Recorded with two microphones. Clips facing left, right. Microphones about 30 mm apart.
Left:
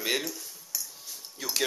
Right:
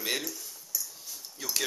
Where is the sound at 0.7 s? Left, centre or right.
Left.